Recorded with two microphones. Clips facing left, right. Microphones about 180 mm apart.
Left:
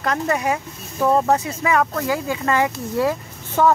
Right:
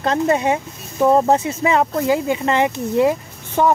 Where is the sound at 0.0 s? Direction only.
25° right (ahead or behind).